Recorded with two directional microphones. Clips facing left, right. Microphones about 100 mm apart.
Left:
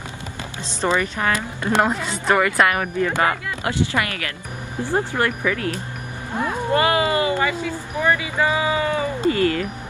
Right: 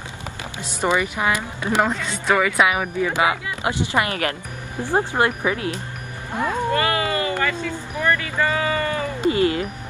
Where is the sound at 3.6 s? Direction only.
25° right (ahead or behind).